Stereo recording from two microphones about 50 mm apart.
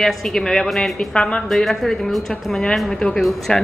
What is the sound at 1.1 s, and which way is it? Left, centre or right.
Speech, left.